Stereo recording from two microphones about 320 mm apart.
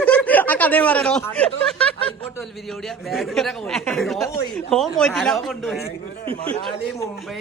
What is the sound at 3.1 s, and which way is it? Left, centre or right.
A man's voice, centre.